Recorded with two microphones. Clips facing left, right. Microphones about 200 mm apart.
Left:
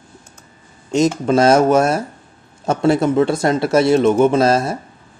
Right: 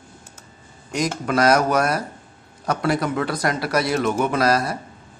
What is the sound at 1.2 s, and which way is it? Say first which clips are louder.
Speech: left 4 dB; 25° left (ahead or behind).